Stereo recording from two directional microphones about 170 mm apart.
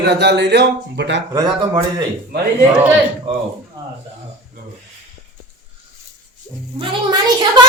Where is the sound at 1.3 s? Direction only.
25° right (ahead or behind).